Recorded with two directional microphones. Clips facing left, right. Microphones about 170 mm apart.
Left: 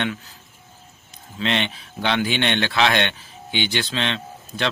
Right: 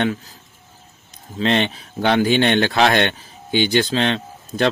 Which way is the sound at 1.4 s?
40° right (ahead or behind).